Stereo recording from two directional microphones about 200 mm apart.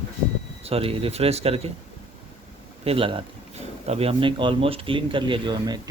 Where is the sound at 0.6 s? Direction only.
30° right (ahead or behind).